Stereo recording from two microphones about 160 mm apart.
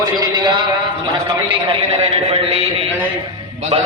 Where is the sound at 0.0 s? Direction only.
25° right (ahead or behind).